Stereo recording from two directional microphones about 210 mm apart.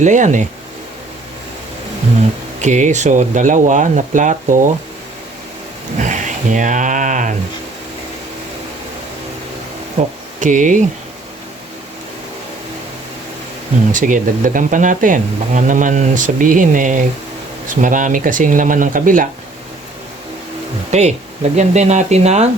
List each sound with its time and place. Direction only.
0.0 s speech: 35° right (ahead or behind)
2.6 s speech: 35° right (ahead or behind)
6.0 s a sound: 35° right (ahead or behind)
10.0 s speech: 30° right (ahead or behind)
13.9 s speech: 40° right (ahead or behind)
20.9 s speech: 30° right (ahead or behind)